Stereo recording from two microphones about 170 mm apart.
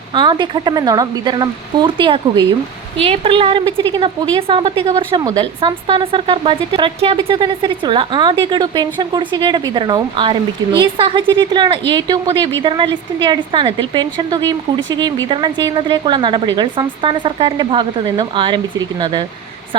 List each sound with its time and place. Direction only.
0.1 s a woman's voice: 25° right (ahead or behind)